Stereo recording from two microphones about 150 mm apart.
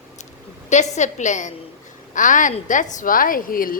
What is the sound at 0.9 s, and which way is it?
A woman's voice, 50° left (ahead or behind).